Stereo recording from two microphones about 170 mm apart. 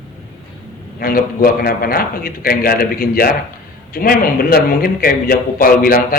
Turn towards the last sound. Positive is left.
turn(degrees=60)  # may be behind; listen again after turning